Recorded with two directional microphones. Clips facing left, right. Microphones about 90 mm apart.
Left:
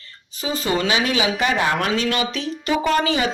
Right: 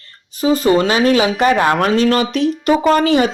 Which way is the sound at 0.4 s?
40° right (ahead or behind).